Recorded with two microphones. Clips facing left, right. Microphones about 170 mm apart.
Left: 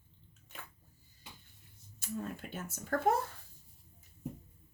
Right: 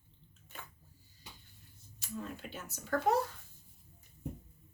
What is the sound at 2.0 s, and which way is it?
A woman's voice, 50° left (ahead or behind).